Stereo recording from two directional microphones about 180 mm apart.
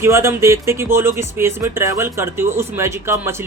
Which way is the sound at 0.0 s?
15° right (ahead or behind).